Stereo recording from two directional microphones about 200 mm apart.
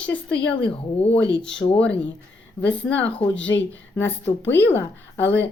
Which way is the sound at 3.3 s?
65° left (ahead or behind).